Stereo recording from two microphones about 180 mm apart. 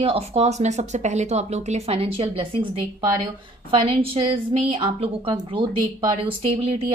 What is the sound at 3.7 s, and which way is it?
A woman's voice, 30° right (ahead or behind).